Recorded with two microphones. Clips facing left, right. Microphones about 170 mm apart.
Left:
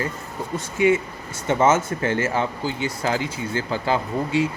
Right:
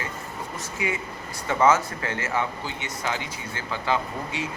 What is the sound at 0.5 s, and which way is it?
Speech, 25° left (ahead or behind).